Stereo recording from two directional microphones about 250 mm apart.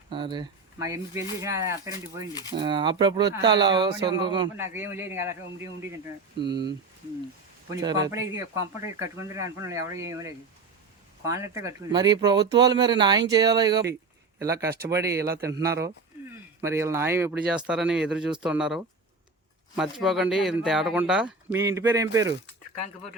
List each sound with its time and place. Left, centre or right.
0.1 s speech: centre
6.4 s speech: right
7.7 s speech: centre